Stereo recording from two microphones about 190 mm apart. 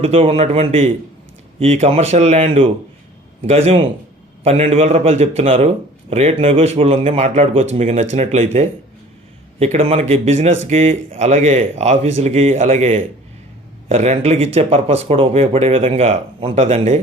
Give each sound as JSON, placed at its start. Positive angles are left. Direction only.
{"t": 0.0, "sound": "a man's voice", "side_deg": -30}